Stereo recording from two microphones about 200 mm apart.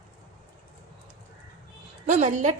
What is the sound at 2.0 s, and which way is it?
Speech, 35° right (ahead or behind).